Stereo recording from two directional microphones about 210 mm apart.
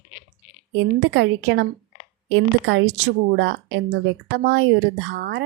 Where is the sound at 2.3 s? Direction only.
70° right (ahead or behind).